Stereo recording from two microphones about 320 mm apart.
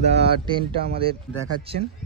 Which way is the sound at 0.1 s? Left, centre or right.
Centre.